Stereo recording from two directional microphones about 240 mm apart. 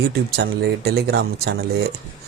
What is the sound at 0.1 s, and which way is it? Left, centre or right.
Speech, right.